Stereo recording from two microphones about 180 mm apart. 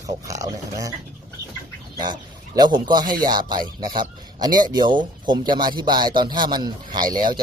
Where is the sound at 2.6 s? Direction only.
25° right (ahead or behind).